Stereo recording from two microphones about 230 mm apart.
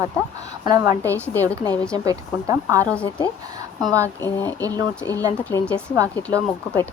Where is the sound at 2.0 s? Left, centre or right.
Centre.